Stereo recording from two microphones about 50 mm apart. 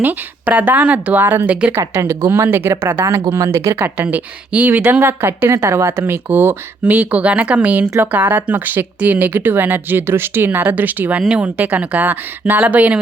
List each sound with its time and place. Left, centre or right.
0.0 s speech: right
1.2 s speech: right
2.0 s speech: right
3.8 s speech: right
4.1 s speech: right
4.7 s speech: right
5.5 s speech: right
6.8 s speech: right
7.9 s speech: right
8.1 s speech: right
11.3 s speech: right